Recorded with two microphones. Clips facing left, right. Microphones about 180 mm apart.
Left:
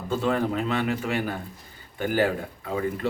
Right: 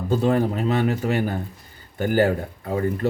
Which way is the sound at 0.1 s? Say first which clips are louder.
Right 4 dB; 40° right (ahead or behind).